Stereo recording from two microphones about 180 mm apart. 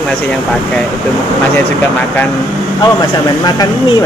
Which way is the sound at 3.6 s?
20° left (ahead or behind).